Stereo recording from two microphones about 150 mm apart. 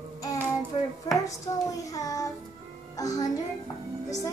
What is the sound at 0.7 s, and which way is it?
Chopping, 45° left (ahead or behind).